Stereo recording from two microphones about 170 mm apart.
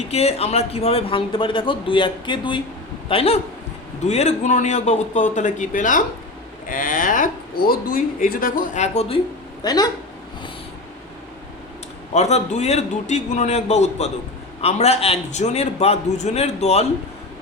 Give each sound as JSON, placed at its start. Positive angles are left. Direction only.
{"t": 0.1, "sound": "a man's voice", "side_deg": 40}
{"t": 9.6, "sound": "speech", "side_deg": 25}
{"t": 12.1, "sound": "a man's voice", "side_deg": 40}